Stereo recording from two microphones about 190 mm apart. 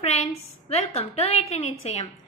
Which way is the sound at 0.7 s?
35° left (ahead or behind).